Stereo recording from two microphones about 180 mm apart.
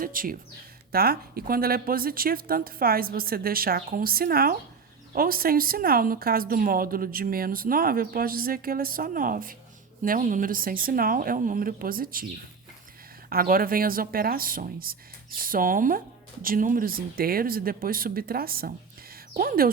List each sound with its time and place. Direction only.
0.0 s speech: 50° right (ahead or behind)
13.3 s speech: 55° right (ahead or behind)